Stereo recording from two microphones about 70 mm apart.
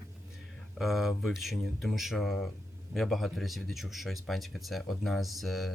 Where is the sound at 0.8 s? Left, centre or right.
Centre.